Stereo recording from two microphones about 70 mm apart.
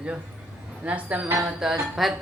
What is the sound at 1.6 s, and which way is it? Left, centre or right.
Speech, centre.